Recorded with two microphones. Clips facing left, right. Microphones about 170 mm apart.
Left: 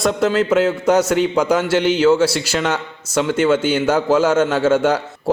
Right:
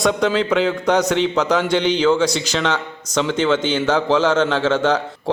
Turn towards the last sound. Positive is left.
turn(degrees=10)  # may be behind; listen again after turning